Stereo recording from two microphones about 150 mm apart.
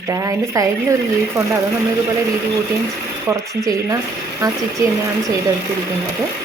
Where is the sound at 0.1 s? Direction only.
20° right (ahead or behind).